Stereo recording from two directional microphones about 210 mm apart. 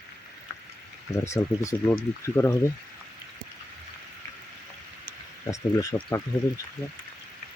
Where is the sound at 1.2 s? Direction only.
15° left (ahead or behind).